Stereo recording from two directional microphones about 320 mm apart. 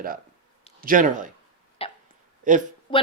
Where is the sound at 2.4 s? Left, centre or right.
Right.